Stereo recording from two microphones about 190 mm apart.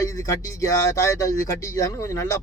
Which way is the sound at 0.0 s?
15° left (ahead or behind).